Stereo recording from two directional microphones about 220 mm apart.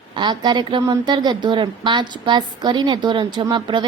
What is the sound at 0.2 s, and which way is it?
A woman's voice, 20° right (ahead or behind).